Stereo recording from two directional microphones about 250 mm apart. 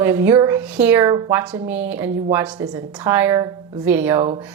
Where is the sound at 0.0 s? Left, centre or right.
Centre.